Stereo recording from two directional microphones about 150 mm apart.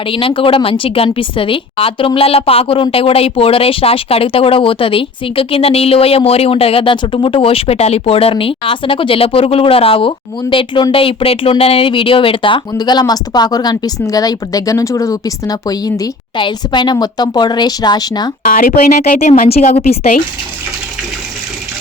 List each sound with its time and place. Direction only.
0.1 s a woman's voice: 35° left (ahead or behind)
18.4 s speech: 70° left (ahead or behind)
19.5 s a woman's voice: 45° left (ahead or behind)